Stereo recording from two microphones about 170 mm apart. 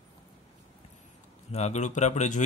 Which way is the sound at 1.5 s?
40° left (ahead or behind).